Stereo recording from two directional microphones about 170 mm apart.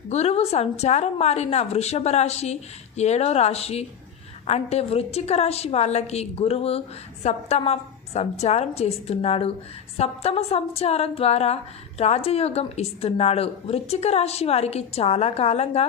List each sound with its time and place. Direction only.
0.1 s a woman's voice: 40° left (ahead or behind)